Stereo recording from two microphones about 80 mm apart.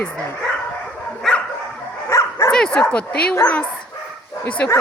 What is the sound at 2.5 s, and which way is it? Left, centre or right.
Speech, centre.